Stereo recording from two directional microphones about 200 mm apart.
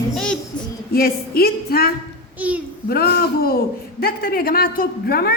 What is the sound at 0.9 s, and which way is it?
A man's voice, 50° left (ahead or behind).